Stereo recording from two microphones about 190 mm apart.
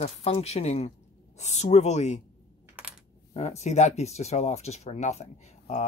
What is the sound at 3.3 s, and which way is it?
Speech, 35° left (ahead or behind).